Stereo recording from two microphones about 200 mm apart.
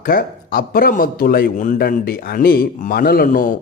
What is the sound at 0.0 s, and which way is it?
A man's voice, 45° left (ahead or behind).